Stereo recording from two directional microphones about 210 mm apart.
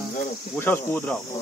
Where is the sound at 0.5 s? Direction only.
10° left (ahead or behind).